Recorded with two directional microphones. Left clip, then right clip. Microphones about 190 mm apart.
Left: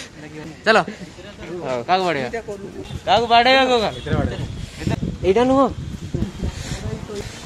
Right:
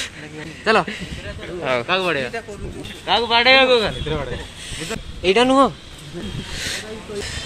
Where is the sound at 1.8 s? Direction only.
35° left (ahead or behind).